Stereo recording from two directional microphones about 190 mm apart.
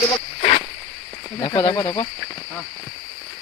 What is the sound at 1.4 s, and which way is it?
Speech, 25° left (ahead or behind).